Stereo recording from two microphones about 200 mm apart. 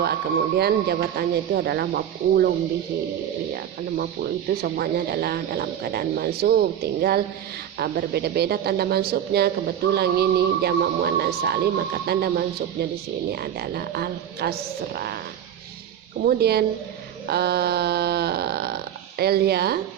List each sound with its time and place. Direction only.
0.0 s speech: 55° right (ahead or behind)
3.5 s speech: 50° right (ahead or behind)
16.2 s speech: 50° right (ahead or behind)
17.2 s a sound: 55° right (ahead or behind)